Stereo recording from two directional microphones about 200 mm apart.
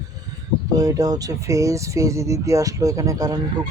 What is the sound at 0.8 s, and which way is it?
Speech, 20° right (ahead or behind).